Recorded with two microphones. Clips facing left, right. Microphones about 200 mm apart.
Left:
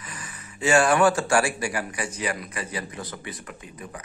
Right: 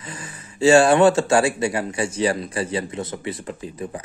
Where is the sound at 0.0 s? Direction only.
30° right (ahead or behind).